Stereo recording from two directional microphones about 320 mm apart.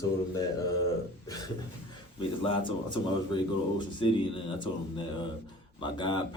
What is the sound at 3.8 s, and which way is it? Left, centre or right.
A man's voice, centre.